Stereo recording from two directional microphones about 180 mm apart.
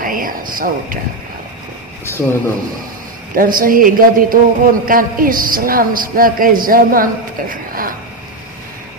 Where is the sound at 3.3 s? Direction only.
50° right (ahead or behind).